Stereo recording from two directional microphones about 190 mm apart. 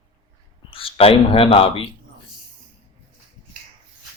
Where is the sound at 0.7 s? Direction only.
30° left (ahead or behind).